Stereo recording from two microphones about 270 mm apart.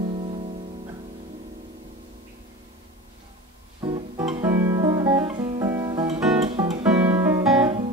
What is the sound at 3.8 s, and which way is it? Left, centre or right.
Guitar, centre.